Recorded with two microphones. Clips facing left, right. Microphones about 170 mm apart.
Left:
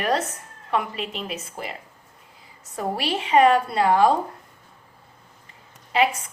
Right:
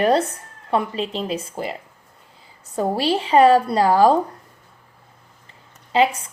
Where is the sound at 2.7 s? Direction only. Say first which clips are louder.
Right 6 dB; 30° right (ahead or behind).